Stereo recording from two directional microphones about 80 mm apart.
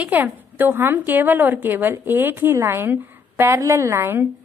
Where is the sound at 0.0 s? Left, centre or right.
Right.